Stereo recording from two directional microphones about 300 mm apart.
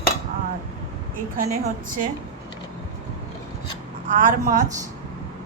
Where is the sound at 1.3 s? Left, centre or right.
Right.